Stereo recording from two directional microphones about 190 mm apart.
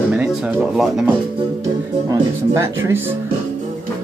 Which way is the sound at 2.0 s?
15° right (ahead or behind).